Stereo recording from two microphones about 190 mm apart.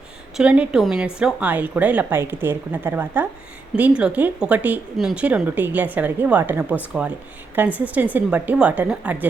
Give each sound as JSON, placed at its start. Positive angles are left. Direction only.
{"t": 0.3, "sound": "speech", "side_deg": -5}